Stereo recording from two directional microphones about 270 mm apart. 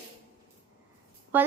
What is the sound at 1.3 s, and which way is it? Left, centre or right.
Speech, centre.